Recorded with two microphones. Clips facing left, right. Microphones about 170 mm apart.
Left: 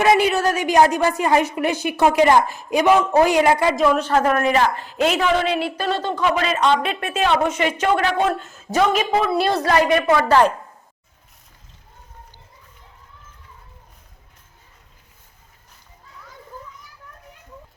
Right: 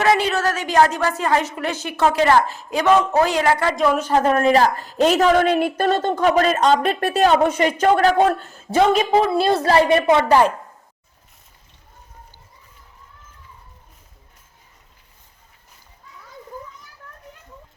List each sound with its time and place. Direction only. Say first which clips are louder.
0.0 s a woman's voice: left 2 dB; 15° left (ahead or behind)
3.8 s speech: left 1 dB; 10° right (ahead or behind)
4.2 s a woman's voice: right 5 dB; 30° right (ahead or behind)